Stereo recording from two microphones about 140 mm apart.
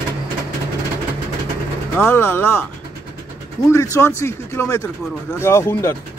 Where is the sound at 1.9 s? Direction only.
15° left (ahead or behind).